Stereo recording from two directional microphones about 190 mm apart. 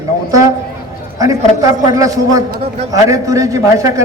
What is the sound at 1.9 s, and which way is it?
A man's voice, 15° right (ahead or behind).